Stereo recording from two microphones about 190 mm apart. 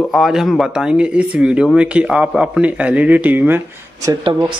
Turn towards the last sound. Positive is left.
turn(degrees=-25)  # may be behind; listen again after turning